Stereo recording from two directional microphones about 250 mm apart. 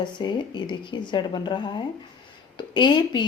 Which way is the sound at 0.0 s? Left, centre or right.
Centre.